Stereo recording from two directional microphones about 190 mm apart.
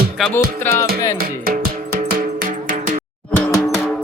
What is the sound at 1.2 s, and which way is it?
Music, 50° right (ahead or behind).